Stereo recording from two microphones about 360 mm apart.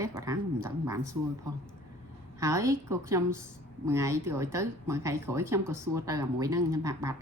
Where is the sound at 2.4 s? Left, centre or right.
Centre.